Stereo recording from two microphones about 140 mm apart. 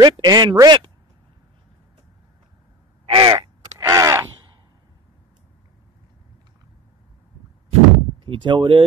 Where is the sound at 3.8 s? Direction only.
25° right (ahead or behind).